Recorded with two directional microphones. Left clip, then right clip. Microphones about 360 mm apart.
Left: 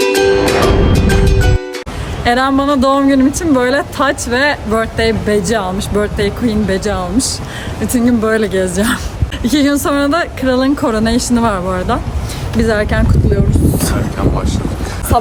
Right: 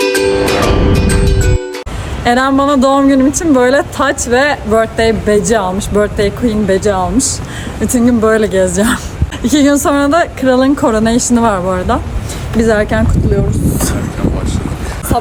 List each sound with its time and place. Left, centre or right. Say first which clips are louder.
0.3 s music: even; centre
2.2 s speech: right 2 dB; centre